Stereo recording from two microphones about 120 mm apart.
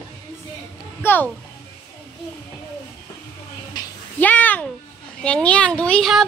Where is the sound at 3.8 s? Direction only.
35° left (ahead or behind).